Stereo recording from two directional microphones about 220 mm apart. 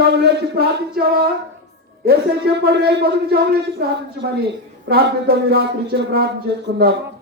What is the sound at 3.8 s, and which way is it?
Speech, 45° right (ahead or behind).